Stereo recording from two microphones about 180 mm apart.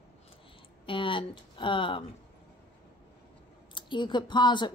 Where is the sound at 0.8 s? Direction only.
30° left (ahead or behind).